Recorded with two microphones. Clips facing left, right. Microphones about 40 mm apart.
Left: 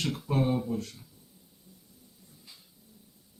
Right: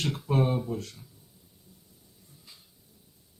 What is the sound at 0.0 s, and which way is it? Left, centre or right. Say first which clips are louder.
Speech: right 2 dB; right.